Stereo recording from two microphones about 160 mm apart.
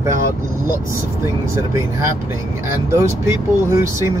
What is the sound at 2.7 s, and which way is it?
Speech, 15° right (ahead or behind).